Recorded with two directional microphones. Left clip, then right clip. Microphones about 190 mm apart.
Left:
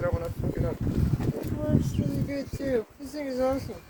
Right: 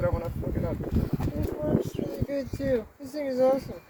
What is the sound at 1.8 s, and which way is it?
Speech, 15° left (ahead or behind).